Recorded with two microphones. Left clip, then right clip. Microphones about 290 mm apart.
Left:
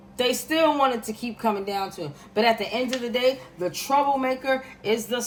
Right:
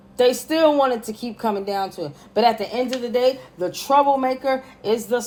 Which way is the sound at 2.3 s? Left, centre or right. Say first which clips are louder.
Right 3 dB; centre.